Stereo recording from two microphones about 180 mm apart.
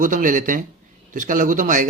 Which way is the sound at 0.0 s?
50° right (ahead or behind).